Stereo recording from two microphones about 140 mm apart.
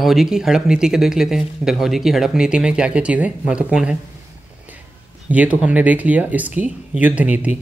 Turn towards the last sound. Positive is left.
turn(degrees=-10)  # may be behind; listen again after turning